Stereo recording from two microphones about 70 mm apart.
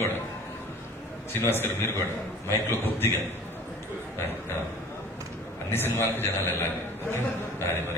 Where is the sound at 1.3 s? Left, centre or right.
Left.